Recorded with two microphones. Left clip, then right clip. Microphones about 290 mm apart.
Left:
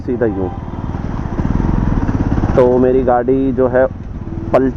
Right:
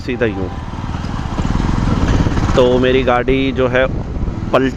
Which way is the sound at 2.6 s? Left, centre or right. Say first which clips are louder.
Left 1 dB; right.